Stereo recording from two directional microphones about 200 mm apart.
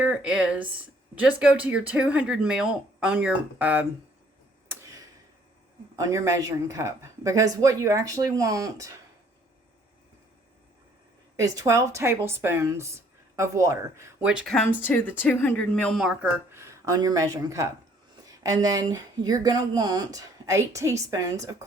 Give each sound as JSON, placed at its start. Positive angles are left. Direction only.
{"t": 0.0, "sound": "speech", "side_deg": -5}
{"t": 4.7, "sound": "a sound", "side_deg": -15}
{"t": 6.0, "sound": "speech", "side_deg": -15}
{"t": 11.3, "sound": "speech", "side_deg": -15}
{"t": 16.6, "sound": "speech", "side_deg": -15}